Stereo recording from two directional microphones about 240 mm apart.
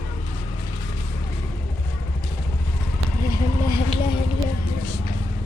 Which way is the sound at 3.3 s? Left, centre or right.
Centre.